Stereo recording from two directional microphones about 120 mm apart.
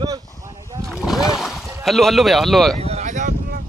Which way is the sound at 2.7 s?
60° right (ahead or behind).